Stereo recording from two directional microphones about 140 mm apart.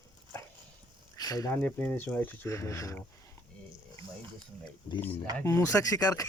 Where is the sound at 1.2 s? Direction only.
25° left (ahead or behind).